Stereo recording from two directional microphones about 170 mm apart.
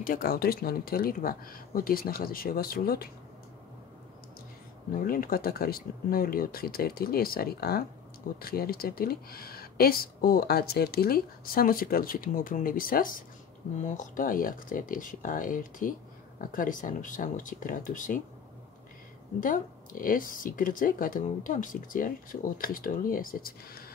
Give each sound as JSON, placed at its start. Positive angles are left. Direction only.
{"t": 0.0, "sound": "speech", "side_deg": 55}
{"t": 4.9, "sound": "speech", "side_deg": 55}
{"t": 19.4, "sound": "speech", "side_deg": 50}